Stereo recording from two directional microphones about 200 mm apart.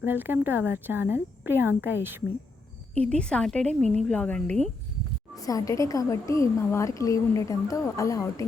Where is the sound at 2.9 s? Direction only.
5° left (ahead or behind).